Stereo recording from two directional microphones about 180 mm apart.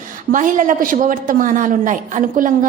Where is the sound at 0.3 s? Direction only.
45° right (ahead or behind).